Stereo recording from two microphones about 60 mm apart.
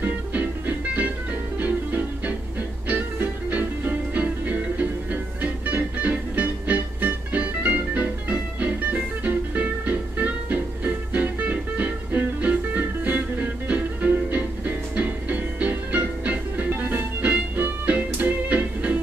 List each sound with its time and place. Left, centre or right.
0.0 s music: right